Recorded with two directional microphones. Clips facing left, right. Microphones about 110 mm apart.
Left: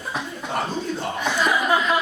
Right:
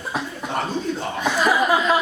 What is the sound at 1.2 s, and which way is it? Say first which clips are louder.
Speech: right 3 dB; 5° right (ahead or behind).